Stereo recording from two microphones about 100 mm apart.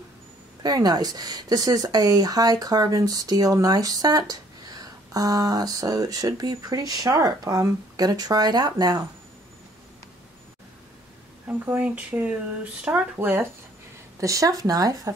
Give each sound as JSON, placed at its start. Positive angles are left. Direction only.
{"t": 0.6, "sound": "speech", "side_deg": -40}
{"t": 11.4, "sound": "speech", "side_deg": -20}
{"t": 14.2, "sound": "speech", "side_deg": -35}